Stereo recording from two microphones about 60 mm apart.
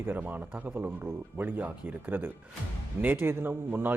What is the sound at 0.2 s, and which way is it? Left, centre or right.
A man's voice, right.